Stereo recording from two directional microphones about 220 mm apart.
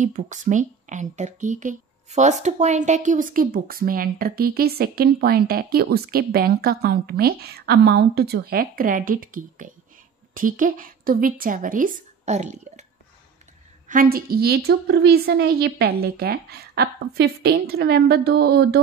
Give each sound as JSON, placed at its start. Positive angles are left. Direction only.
{"t": 0.0, "sound": "a woman's voice", "side_deg": -35}
{"t": 13.8, "sound": "a woman's voice", "side_deg": -40}